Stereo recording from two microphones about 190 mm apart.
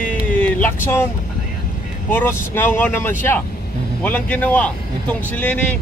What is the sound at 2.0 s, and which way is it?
Speech, 10° left (ahead or behind).